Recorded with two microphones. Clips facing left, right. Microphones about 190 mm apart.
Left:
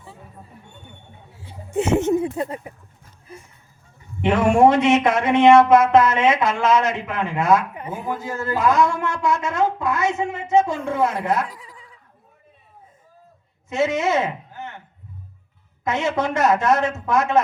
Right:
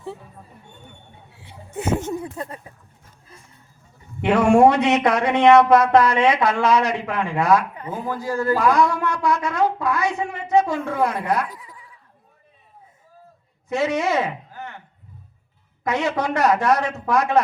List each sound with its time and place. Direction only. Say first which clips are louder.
1.7 s speech: left 6 dB; 25° left (ahead or behind)
4.2 s speech: right 1 dB; 20° left (ahead or behind)
11.6 s goat: even; 25° left (ahead or behind)
13.7 s speech: left 1 dB; 20° left (ahead or behind)
15.9 s speech: even; 25° left (ahead or behind)